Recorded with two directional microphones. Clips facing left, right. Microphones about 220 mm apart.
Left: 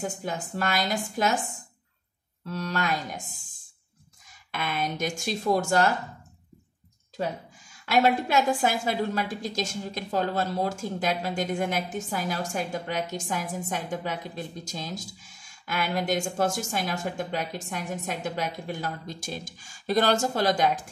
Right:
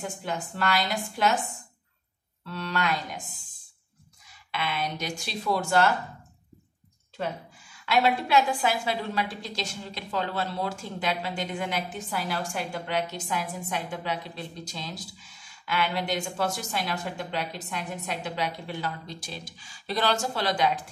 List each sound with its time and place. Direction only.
0.0 s a woman's voice: 45° left (ahead or behind)
2.4 s a woman's voice: 40° left (ahead or behind)
4.5 s a woman's voice: 45° left (ahead or behind)
7.8 s a woman's voice: 45° left (ahead or behind)